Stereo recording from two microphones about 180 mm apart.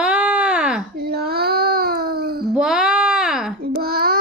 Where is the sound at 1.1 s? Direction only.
60° right (ahead or behind).